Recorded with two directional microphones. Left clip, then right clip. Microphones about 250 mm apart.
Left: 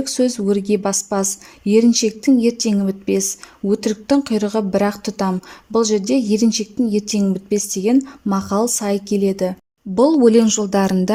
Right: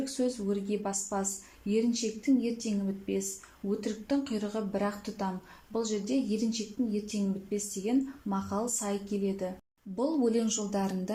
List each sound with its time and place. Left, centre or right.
0.0 s a woman's voice: left